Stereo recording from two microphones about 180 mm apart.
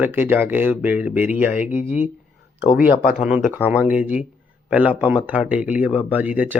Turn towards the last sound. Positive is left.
turn(degrees=-10)  # may be behind; listen again after turning